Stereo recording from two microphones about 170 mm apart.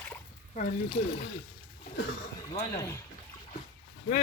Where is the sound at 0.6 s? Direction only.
50° left (ahead or behind).